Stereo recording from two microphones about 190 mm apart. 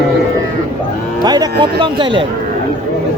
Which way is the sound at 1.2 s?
20° right (ahead or behind).